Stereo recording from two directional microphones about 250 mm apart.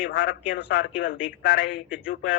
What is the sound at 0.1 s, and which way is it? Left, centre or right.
A man's voice, left.